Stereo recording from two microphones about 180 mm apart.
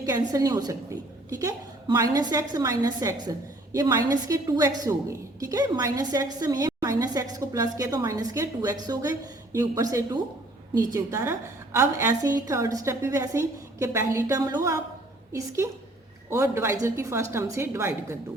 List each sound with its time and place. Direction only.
0.0 s a woman's voice: 20° right (ahead or behind)